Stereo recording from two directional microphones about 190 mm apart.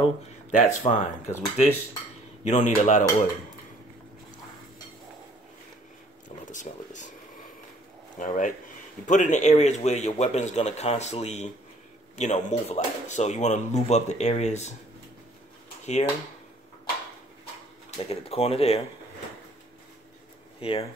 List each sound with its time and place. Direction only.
0.0 s speech: 40° left (ahead or behind)
6.2 s a sound: 40° left (ahead or behind)
8.2 s speech: 40° left (ahead or behind)
15.8 s speech: 35° left (ahead or behind)
17.9 s speech: 30° left (ahead or behind)